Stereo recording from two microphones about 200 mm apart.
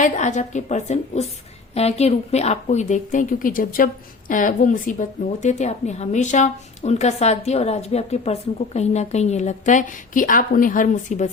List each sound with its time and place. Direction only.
0.0 s a woman's voice: 35° left (ahead or behind)